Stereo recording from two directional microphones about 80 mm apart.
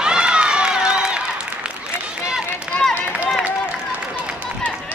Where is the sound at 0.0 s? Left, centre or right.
Centre.